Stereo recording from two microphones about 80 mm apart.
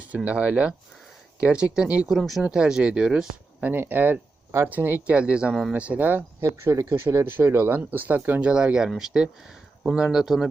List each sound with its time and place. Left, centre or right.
0.3 s speech: centre
2.1 s speech: centre
3.7 s speech: right
6.4 s speech: right; by 10.5 s centre